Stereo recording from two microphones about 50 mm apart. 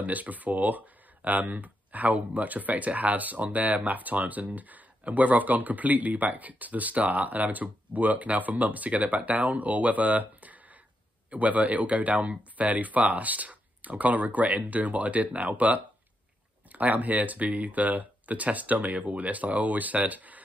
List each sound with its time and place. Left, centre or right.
0.0 s speech: right